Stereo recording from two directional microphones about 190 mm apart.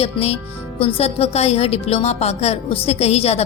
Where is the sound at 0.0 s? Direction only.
30° left (ahead or behind).